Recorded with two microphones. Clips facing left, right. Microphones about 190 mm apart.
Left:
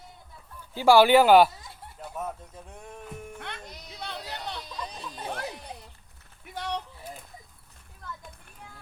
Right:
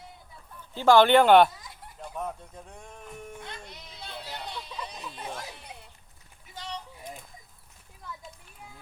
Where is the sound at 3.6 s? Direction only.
40° left (ahead or behind).